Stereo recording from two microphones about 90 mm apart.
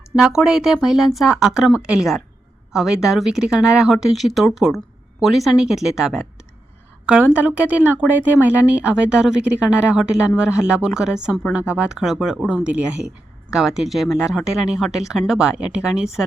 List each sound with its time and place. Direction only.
0.2 s speech: 5° right (ahead or behind)